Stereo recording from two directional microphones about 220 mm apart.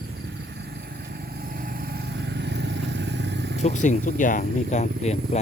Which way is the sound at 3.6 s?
35° left (ahead or behind).